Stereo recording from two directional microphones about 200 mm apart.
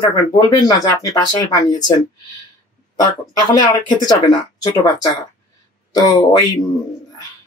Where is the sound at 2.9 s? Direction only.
20° left (ahead or behind).